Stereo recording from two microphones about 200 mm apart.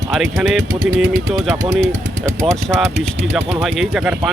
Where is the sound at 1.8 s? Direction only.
40° right (ahead or behind).